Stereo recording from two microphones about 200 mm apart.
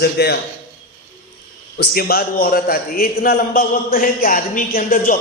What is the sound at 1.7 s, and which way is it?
A man's voice, 50° left (ahead or behind).